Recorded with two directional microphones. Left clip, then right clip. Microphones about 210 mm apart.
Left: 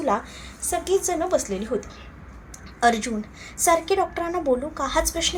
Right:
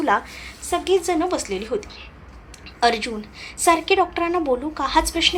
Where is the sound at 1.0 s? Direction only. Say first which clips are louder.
Right 1 dB; 25° right (ahead or behind).